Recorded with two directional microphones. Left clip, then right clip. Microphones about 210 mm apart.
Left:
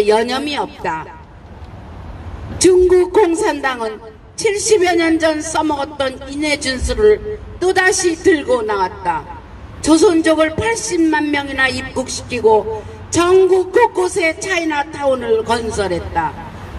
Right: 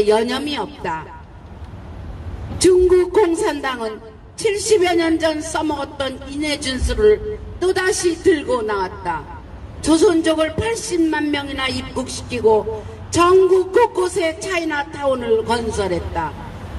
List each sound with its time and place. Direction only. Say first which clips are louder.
0.0 s speech: left 2 dB; 30° left (ahead or behind)
2.6 s speech: left 2 dB; 30° left (ahead or behind)